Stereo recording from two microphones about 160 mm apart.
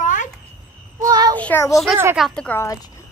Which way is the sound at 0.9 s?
20° right (ahead or behind).